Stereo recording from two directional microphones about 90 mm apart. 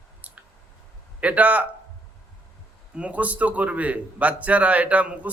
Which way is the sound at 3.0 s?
15° right (ahead or behind).